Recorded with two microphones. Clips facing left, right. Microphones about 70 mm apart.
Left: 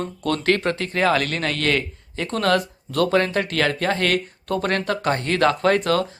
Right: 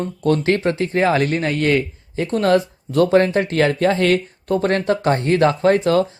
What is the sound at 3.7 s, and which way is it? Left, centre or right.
Speech, left.